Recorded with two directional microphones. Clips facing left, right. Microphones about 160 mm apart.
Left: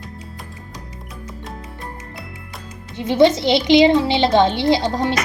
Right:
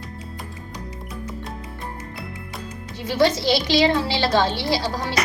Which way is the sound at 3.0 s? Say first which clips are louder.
Left 5 dB; 20° left (ahead or behind).